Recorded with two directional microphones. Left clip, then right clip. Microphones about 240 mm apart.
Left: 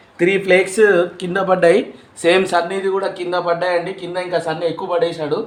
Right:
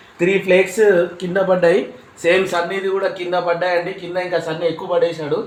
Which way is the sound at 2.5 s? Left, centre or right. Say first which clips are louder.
Left 2 dB; centre.